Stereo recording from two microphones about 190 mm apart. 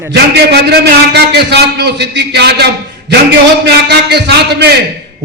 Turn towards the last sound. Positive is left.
turn(degrees=-60)  # may be behind; listen again after turning